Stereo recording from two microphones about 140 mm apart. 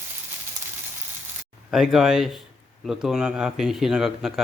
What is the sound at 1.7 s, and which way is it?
Speech, centre (ahead or behind).